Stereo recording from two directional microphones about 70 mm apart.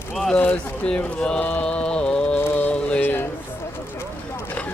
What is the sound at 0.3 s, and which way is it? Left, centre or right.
Speech, left.